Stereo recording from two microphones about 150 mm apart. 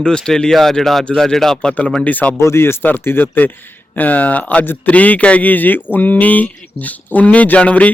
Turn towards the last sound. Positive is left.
turn(degrees=10)  # may be behind; listen again after turning